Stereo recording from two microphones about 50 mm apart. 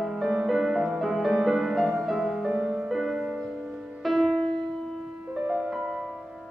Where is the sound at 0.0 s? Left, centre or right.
Centre.